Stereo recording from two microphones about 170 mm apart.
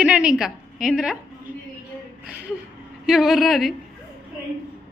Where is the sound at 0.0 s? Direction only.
5° right (ahead or behind).